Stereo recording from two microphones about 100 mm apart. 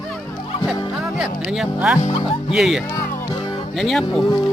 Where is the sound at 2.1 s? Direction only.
65° left (ahead or behind).